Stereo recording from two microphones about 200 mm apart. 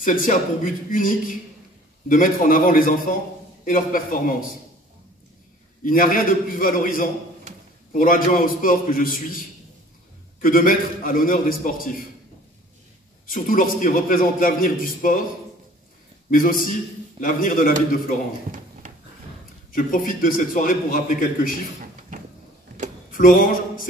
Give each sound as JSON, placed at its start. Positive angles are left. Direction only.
{"t": 0.0, "sound": "a man's voice", "side_deg": 40}
{"t": 5.9, "sound": "a man's voice", "side_deg": 45}
{"t": 10.4, "sound": "a man's voice", "side_deg": 45}
{"t": 13.3, "sound": "a man's voice", "side_deg": 45}
{"t": 16.3, "sound": "a man's voice", "side_deg": 45}
{"t": 18.8, "sound": "a sound", "side_deg": -40}
{"t": 19.7, "sound": "a man's voice", "side_deg": 45}
{"t": 23.1, "sound": "a man's voice", "side_deg": 40}